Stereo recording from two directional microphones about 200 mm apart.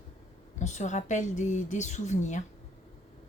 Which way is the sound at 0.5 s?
35° left (ahead or behind).